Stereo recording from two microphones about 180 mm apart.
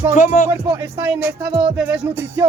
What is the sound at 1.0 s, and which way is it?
Speech, 10° right (ahead or behind).